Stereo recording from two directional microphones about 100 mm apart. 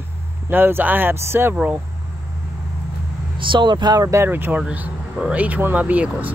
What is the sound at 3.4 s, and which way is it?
Speech, 55° right (ahead or behind).